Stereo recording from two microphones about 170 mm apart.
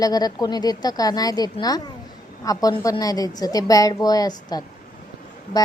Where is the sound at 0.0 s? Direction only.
25° left (ahead or behind).